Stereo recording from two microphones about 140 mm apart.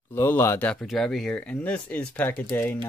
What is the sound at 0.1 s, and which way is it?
Speech, 15° left (ahead or behind).